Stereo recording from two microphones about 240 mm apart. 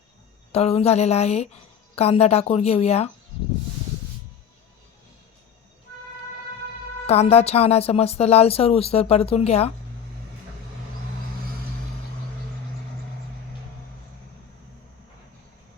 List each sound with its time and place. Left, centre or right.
0.5 s speech: left
7.1 s speech: left